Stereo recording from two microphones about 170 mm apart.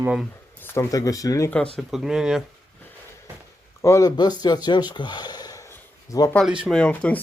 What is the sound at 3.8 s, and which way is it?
Speech, 20° left (ahead or behind).